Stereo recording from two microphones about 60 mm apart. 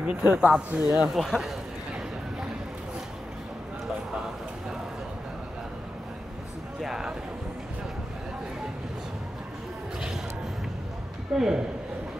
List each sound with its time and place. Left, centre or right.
0.0 s speech: right
0.8 s speech: centre
6.8 s a sound: centre
11.3 s speech: centre